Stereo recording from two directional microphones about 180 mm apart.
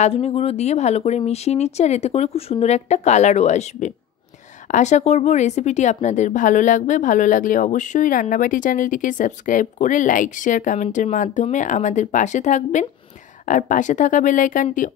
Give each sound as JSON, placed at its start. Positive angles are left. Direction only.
{"t": 0.0, "sound": "a woman's voice", "side_deg": 35}